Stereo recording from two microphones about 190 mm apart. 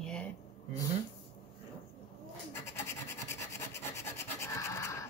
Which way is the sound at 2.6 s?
15° left (ahead or behind).